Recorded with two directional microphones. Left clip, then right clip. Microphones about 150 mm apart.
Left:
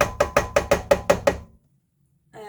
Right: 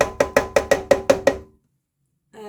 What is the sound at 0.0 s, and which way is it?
Music, 45° right (ahead or behind).